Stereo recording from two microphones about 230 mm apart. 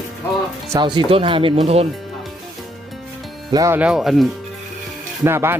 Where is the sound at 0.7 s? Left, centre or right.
Centre.